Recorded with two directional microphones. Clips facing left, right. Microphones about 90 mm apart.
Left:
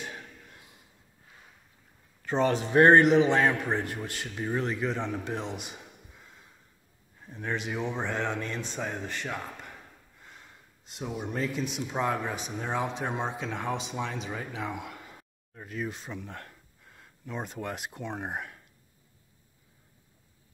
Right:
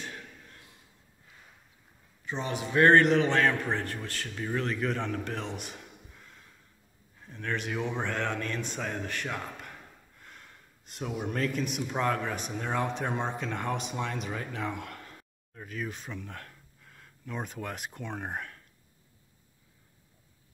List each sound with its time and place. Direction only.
2.2 s speech: 50° left (ahead or behind)
2.5 s speech: 30° left (ahead or behind)
3.0 s a man's voice: 10° left (ahead or behind)
4.7 s a man's voice: 5° left (ahead or behind)
7.5 s speech: 5° left (ahead or behind)
8.8 s a sound: 5° left (ahead or behind)
11.2 s speech: 5° left (ahead or behind)